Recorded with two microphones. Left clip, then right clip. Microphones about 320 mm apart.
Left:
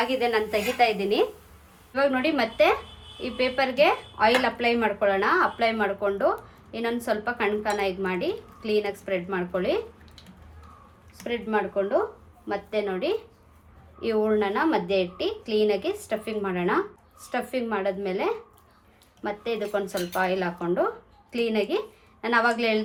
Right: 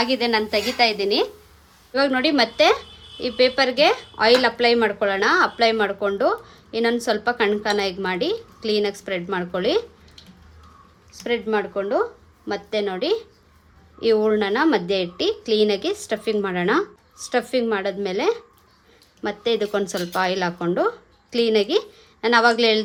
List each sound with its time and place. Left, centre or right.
0.0 s a woman's voice: centre
1.9 s a woman's voice: right
11.2 s a woman's voice: right